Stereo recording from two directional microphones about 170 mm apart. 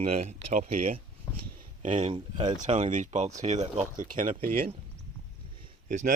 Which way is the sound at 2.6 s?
45° right (ahead or behind).